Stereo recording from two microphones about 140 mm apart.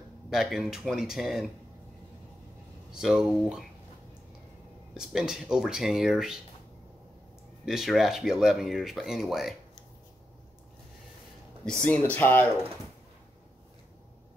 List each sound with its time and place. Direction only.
0.3 s speech: 5° right (ahead or behind)
2.9 s speech: 5° right (ahead or behind)
4.9 s speech: 5° right (ahead or behind)
7.6 s speech: centre (ahead or behind)
11.6 s speech: 5° left (ahead or behind)